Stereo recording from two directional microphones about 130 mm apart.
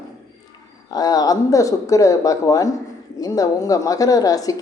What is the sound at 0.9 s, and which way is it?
A woman's voice, 30° left (ahead or behind).